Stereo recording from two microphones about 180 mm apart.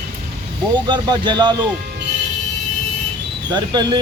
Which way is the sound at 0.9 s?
25° right (ahead or behind).